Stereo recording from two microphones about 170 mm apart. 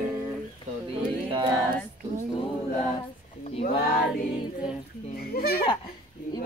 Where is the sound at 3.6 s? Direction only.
65° left (ahead or behind).